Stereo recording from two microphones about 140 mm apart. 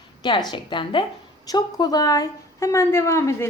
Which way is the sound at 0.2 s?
30° left (ahead or behind).